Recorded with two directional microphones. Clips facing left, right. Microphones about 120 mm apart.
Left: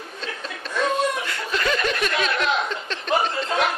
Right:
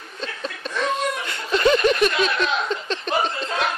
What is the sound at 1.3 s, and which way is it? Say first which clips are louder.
Snicker: right 6 dB; 20° right (ahead or behind).